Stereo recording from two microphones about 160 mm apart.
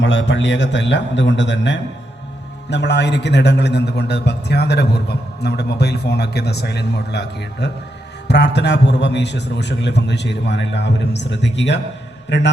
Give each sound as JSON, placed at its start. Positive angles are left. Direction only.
{"t": 0.2, "sound": "a man's voice", "side_deg": 90}